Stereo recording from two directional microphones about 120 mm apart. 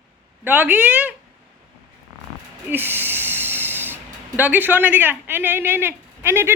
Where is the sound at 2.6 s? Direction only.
15° right (ahead or behind).